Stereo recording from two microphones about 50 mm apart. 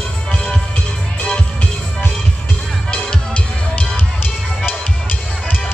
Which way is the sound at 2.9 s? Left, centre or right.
Left.